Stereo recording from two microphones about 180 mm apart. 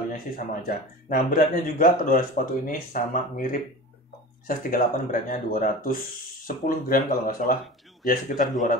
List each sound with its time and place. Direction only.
0.6 s speech: 50° left (ahead or behind)